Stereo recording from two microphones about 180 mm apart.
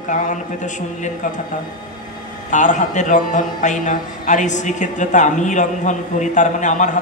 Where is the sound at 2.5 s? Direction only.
45° left (ahead or behind).